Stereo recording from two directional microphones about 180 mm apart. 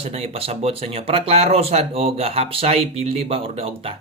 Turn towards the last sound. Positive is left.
turn(degrees=-30)  # may be behind; listen again after turning